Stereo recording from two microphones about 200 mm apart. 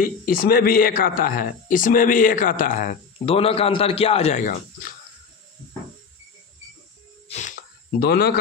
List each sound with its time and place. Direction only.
0.0 s speech: 45° left (ahead or behind)
7.2 s a sound: 35° left (ahead or behind)
8.0 s speech: 50° left (ahead or behind)